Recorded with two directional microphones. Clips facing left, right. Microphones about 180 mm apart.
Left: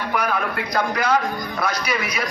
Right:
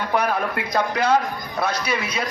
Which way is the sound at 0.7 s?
25° right (ahead or behind).